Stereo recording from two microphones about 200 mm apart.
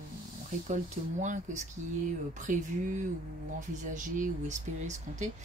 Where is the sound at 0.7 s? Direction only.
35° right (ahead or behind).